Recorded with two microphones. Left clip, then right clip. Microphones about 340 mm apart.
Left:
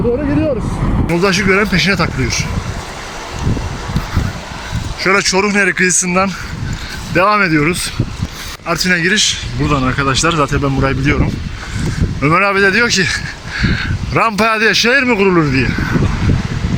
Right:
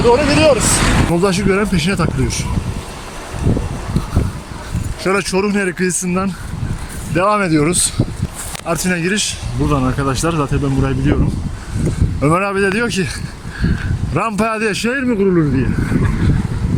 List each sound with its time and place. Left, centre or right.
0.0 s speech: right
1.1 s speech: centre
4.9 s speech: centre
12.2 s speech: centre